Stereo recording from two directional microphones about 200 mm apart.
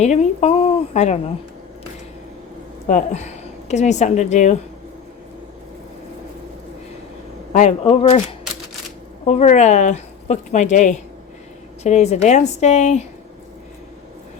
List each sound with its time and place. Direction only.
0.0 s a sound: 35° left (ahead or behind)
2.8 s a woman's voice: 40° left (ahead or behind)
7.5 s speech: 35° left (ahead or behind)
9.2 s speech: 35° left (ahead or behind)